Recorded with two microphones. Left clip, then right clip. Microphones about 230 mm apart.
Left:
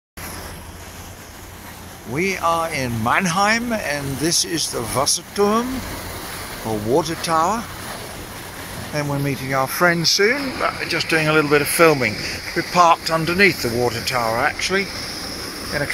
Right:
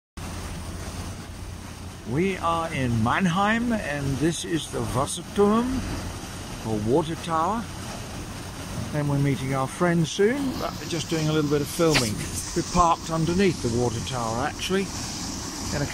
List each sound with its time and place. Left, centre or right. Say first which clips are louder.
2.1 s speech: left 5 dB; centre
6.9 s speech: left 6 dB; centre
8.9 s speech: left 4 dB; centre
11.1 s speech: left 9 dB; centre
12.4 s speech: left 4 dB; right
12.7 s speech: left 7 dB; centre
14.6 s speech: left 6 dB; centre
14.9 s vehicle: left 5 dB; right